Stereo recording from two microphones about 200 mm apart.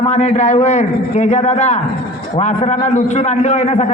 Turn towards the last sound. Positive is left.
turn(degrees=30)  # may be behind; listen again after turning